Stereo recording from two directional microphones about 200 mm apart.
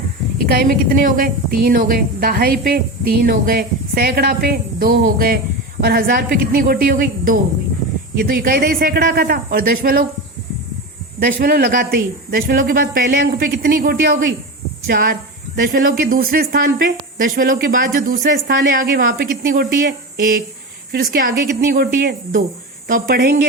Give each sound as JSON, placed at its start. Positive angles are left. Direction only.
{"t": 0.3, "sound": "a woman's voice", "side_deg": -45}
{"t": 11.2, "sound": "a woman's voice", "side_deg": -50}